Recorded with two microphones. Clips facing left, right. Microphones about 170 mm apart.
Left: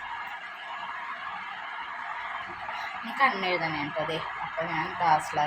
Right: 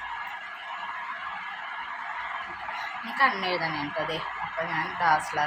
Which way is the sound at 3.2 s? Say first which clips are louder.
Even; 20° left (ahead or behind).